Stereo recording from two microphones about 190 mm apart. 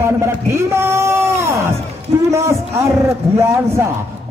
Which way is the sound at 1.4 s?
15° right (ahead or behind).